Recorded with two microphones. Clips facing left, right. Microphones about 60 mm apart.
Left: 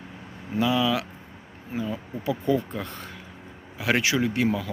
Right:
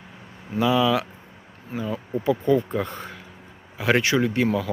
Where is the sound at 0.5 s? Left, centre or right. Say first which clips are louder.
Right 3 dB; centre.